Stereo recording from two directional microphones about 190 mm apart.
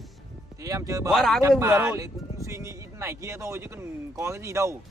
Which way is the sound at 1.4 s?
15° right (ahead or behind).